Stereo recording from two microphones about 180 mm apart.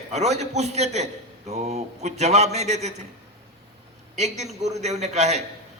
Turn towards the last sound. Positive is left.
turn(degrees=-40)  # may be behind; listen again after turning